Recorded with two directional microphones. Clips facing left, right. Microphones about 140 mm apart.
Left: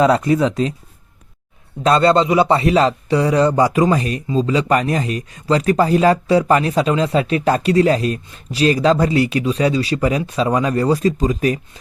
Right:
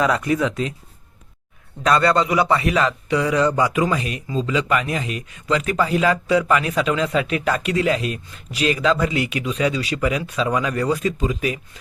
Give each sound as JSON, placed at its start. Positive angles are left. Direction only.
{"t": 0.0, "sound": "speech", "side_deg": 30}
{"t": 1.8, "sound": "speech", "side_deg": 25}